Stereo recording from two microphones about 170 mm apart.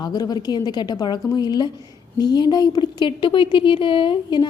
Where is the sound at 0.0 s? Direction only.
25° left (ahead or behind).